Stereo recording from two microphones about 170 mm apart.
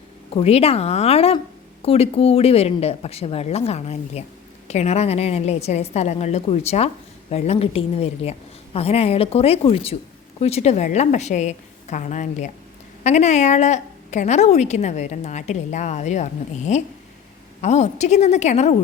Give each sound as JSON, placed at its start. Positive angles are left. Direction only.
{"t": 0.3, "sound": "a woman's voice", "side_deg": 35}